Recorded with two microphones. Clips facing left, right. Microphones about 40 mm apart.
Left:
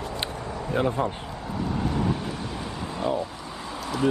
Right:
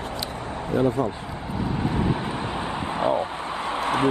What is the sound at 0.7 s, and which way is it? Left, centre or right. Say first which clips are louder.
Speech: right 3 dB; left.